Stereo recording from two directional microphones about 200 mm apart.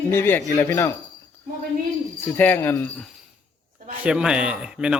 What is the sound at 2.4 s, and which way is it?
Speech, 10° left (ahead or behind).